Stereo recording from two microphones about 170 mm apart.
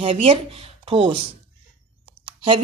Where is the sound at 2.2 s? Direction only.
30° right (ahead or behind).